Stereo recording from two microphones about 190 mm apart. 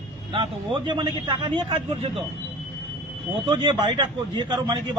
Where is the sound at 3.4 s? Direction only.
25° right (ahead or behind).